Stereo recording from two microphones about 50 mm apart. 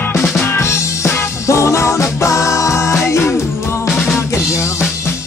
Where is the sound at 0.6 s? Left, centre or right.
Left.